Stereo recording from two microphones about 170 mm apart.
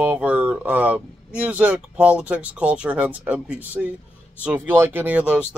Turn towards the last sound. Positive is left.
turn(degrees=-5)  # may be behind; listen again after turning